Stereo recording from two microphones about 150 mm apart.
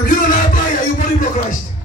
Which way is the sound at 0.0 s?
60° left (ahead or behind).